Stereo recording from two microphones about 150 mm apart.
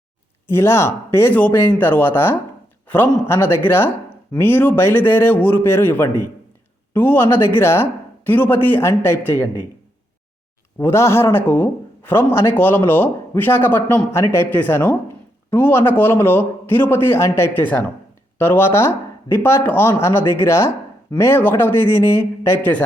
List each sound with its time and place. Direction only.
0.4 s a man's voice: 15° left (ahead or behind)
10.8 s a man's voice: 20° left (ahead or behind)